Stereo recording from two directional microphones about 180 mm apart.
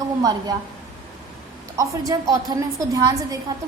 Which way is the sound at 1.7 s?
20° right (ahead or behind).